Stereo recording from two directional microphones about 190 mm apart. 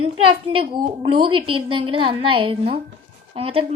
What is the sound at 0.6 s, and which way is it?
A woman's voice, 30° right (ahead or behind).